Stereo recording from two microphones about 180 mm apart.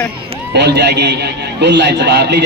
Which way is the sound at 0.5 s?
70° right (ahead or behind).